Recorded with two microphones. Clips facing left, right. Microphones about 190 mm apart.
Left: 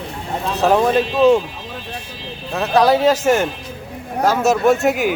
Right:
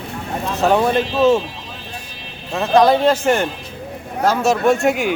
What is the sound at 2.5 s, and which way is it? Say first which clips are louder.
Speech: right 1 dB; centre (ahead or behind).